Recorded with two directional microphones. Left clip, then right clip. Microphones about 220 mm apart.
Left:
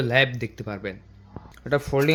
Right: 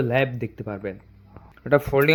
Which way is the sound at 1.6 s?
25° right (ahead or behind).